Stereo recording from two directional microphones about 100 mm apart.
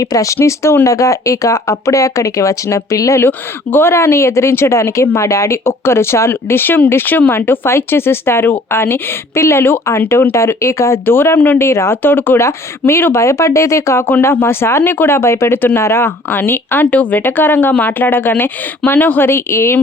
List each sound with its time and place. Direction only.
0.1 s speech: 35° left (ahead or behind)